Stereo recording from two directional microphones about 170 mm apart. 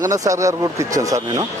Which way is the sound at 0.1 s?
20° right (ahead or behind).